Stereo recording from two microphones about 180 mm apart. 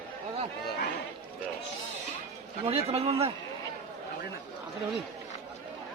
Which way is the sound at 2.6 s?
35° right (ahead or behind).